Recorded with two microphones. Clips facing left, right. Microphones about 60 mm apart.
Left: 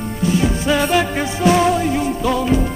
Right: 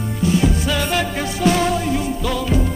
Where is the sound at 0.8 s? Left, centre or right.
Centre.